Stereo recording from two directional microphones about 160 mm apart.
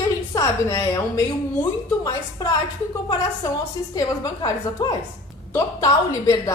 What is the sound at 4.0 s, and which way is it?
Speech, 25° left (ahead or behind).